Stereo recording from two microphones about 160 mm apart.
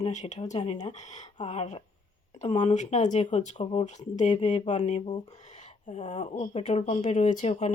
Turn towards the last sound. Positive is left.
turn(degrees=45)  # may be behind; listen again after turning